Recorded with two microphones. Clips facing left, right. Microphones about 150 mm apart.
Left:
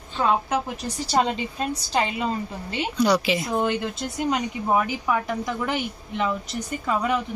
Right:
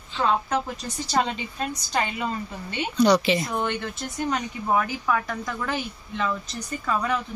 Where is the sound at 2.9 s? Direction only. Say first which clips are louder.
Right 2 dB; 5° left (ahead or behind).